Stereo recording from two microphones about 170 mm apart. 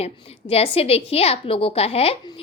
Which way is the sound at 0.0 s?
35° left (ahead or behind).